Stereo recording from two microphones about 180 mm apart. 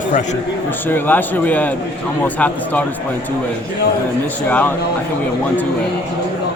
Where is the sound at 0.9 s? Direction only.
10° left (ahead or behind).